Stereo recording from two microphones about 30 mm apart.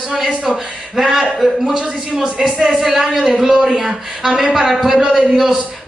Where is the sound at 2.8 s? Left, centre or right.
Centre.